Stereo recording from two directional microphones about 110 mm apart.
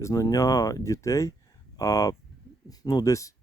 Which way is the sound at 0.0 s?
35° left (ahead or behind).